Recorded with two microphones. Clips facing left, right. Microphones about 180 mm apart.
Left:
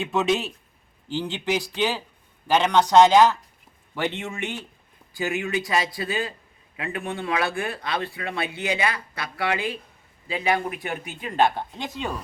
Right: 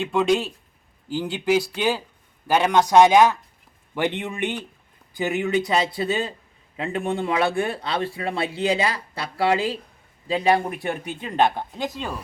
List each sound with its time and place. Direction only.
0.0 s a man's voice: centre (ahead or behind)
1.0 s speech: 10° right (ahead or behind); by 11.3 s 35° right (ahead or behind)
11.3 s speech: 15° right (ahead or behind)